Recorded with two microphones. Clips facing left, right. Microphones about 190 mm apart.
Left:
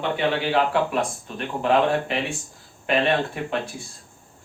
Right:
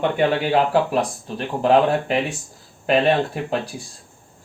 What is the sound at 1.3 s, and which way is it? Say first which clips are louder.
Speech: right 4 dB; 40° right (ahead or behind).